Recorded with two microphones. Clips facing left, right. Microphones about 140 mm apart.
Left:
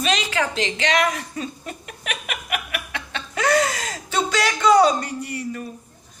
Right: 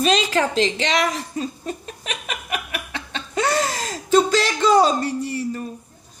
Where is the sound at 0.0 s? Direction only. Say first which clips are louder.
Right 4 dB; 40° right (ahead or behind).